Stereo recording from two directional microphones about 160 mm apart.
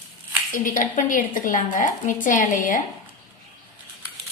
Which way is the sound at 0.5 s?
55° left (ahead or behind).